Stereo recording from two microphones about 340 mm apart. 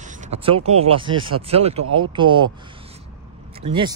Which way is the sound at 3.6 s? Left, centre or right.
Centre.